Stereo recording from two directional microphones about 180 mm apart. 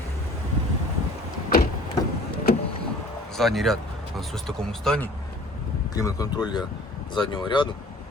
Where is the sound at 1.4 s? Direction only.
55° left (ahead or behind).